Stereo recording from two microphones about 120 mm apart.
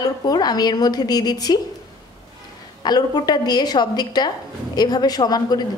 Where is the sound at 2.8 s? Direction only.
35° left (ahead or behind).